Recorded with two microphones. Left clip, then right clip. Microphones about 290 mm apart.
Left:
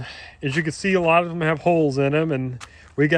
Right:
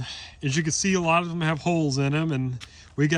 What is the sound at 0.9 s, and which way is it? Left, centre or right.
A man's voice, centre.